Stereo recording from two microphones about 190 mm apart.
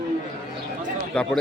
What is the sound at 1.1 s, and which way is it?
Speech, 5° left (ahead or behind).